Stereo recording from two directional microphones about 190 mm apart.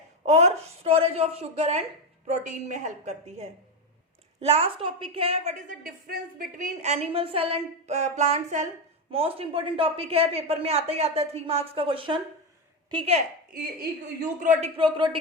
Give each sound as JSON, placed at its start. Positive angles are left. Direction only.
{"t": 0.2, "sound": "speech", "side_deg": -35}
{"t": 13.5, "sound": "speech", "side_deg": -50}
{"t": 14.8, "sound": "speech", "side_deg": -25}